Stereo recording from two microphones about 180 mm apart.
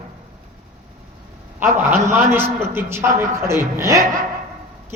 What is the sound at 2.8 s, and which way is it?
A woman's voice, 15° right (ahead or behind).